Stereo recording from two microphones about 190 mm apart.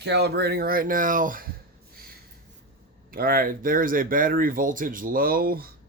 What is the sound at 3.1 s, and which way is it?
Speech, 50° right (ahead or behind).